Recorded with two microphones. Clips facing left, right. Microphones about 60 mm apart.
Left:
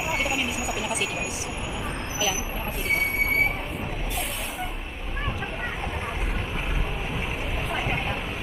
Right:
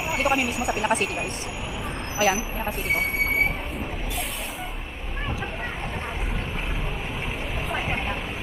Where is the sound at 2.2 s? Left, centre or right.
Right.